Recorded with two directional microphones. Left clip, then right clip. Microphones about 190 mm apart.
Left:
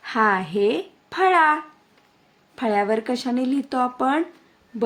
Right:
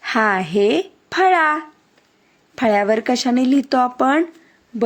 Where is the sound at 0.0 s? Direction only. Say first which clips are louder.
Right 3 dB; 30° right (ahead or behind).